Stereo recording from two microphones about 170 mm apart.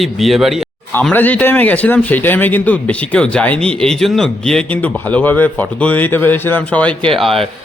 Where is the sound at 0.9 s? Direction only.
10° left (ahead or behind).